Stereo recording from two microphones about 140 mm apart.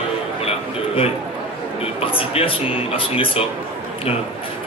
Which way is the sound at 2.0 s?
40° left (ahead or behind).